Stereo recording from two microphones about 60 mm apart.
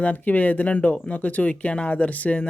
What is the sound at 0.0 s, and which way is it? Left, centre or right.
Speech, left.